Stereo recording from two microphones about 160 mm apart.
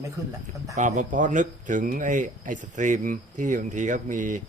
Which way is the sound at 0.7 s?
50° right (ahead or behind).